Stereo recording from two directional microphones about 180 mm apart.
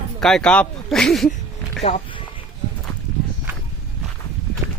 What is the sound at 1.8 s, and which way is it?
Speech, 35° left (ahead or behind).